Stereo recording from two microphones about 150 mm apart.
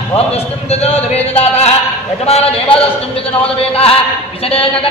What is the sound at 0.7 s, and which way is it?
Speech, 45° left (ahead or behind).